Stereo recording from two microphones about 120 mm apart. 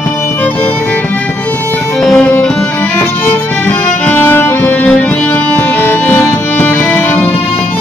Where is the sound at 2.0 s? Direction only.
5° left (ahead or behind).